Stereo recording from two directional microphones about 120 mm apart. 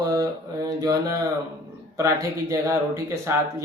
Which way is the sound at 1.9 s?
25° right (ahead or behind).